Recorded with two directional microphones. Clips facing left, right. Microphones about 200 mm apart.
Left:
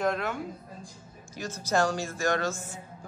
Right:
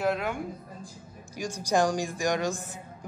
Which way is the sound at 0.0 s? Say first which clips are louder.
Right 1 dB; 10° right (ahead or behind).